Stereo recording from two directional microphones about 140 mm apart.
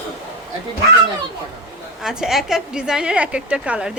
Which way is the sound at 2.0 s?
5° right (ahead or behind).